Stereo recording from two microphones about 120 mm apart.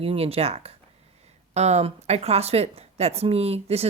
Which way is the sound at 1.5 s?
65° right (ahead or behind).